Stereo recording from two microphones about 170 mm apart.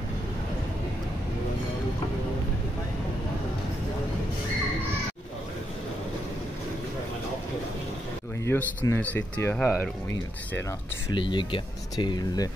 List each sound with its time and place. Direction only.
8.5 s speech: 15° left (ahead or behind)
11.1 s speech: 30° left (ahead or behind)